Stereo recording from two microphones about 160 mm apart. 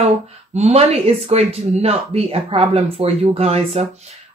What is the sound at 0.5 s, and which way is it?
Speech, 40° right (ahead or behind).